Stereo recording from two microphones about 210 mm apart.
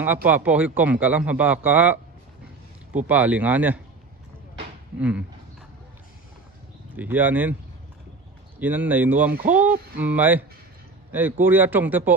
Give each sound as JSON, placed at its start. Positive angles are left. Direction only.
{"t": 0.3, "sound": "a man's voice", "side_deg": -5}
{"t": 3.1, "sound": "a man's voice", "side_deg": -5}
{"t": 4.9, "sound": "a man's voice", "side_deg": -5}
{"t": 6.9, "sound": "a man's voice", "side_deg": -10}
{"t": 8.5, "sound": "a man's voice", "side_deg": -10}
{"t": 9.3, "sound": "speech", "side_deg": -45}
{"t": 9.6, "sound": "a man's voice", "side_deg": -10}